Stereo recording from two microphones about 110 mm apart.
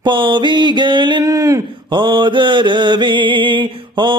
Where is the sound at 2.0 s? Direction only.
45° right (ahead or behind).